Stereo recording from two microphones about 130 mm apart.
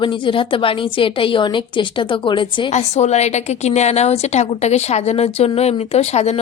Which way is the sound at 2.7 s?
60° left (ahead or behind).